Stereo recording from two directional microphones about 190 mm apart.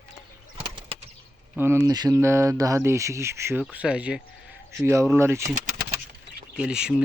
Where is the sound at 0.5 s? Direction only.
30° right (ahead or behind).